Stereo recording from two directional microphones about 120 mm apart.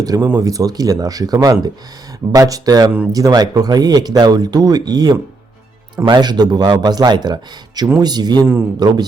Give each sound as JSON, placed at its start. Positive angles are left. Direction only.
{"t": 0.0, "sound": "speech", "side_deg": -30}